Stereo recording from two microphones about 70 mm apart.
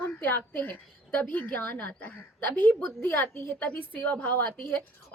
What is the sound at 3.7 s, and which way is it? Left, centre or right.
A woman's voice, left.